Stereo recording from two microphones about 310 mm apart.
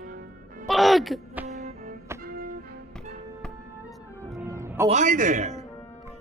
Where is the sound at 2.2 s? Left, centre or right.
Right.